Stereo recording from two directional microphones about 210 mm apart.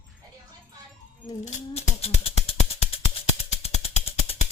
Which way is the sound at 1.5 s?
30° left (ahead or behind).